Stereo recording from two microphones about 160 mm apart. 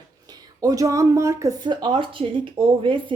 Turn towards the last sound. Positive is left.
turn(degrees=-30)  # may be behind; listen again after turning